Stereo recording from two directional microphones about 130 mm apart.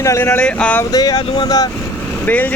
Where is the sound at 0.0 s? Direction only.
20° left (ahead or behind).